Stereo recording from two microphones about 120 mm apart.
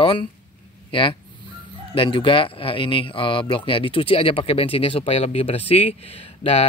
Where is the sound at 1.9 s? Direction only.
45° left (ahead or behind).